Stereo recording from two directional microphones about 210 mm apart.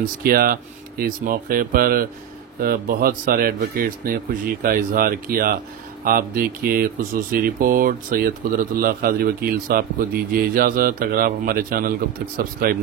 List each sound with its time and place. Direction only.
0.0 s speech: 45° right (ahead or behind)